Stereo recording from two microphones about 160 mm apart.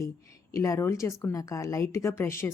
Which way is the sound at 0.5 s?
20° left (ahead or behind).